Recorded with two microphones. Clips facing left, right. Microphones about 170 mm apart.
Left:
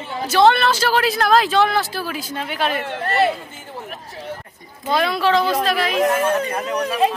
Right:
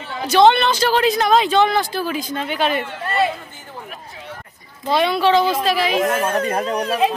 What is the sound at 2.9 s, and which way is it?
Speech, 60° left (ahead or behind).